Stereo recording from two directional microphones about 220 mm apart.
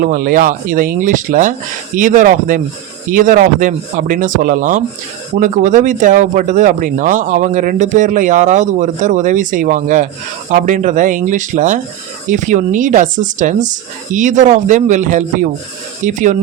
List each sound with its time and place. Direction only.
0.0 s speech: 40° right (ahead or behind)